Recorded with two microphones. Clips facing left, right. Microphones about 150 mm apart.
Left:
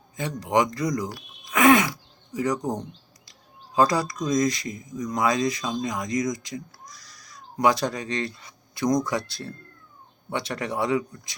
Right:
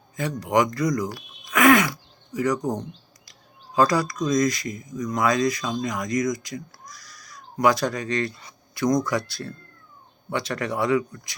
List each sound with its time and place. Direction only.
0.2 s speech: 25° left (ahead or behind)
1.5 s a sound: 25° left (ahead or behind)
2.3 s speech: 30° left (ahead or behind)
3.8 s speech: 25° left (ahead or behind)